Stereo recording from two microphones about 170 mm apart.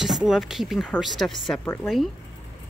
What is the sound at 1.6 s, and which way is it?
Speech, 10° left (ahead or behind).